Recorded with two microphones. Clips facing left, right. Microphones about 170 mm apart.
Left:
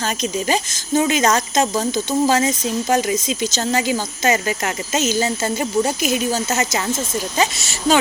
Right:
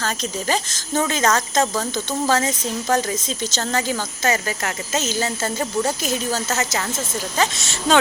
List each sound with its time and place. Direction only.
0.0 s speech: 15° left (ahead or behind)
7.5 s speech: 5° left (ahead or behind)